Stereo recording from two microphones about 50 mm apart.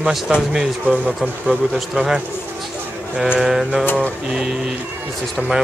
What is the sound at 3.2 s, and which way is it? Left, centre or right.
Speech, centre.